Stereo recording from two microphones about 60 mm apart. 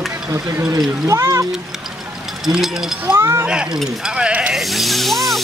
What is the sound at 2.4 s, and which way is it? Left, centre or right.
Speech, centre.